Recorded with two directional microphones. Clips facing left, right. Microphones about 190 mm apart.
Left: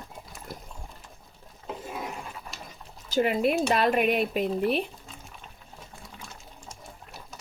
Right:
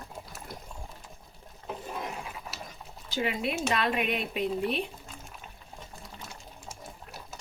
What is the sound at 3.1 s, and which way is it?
A woman's voice, 50° left (ahead or behind).